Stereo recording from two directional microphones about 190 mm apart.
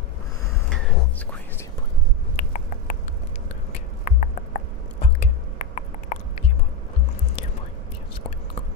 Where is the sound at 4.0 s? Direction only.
40° left (ahead or behind).